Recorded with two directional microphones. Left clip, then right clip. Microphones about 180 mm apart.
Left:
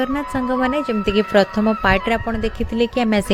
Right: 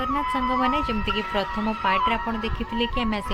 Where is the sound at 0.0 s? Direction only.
30° left (ahead or behind).